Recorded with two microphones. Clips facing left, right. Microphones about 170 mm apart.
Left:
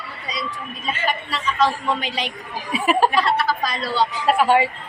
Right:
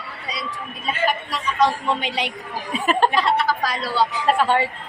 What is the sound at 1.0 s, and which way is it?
A man's voice, 15° right (ahead or behind).